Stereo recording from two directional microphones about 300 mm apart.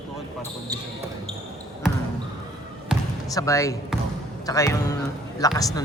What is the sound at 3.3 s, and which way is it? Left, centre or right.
Speech, centre.